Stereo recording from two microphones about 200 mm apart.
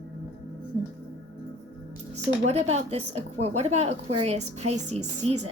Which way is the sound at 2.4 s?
35° right (ahead or behind).